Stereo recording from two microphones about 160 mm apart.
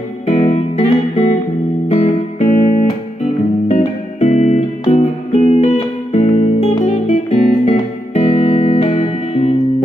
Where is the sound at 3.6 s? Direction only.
40° left (ahead or behind).